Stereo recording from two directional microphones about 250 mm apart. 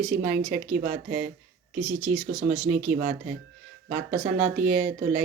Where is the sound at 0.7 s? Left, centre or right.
Right.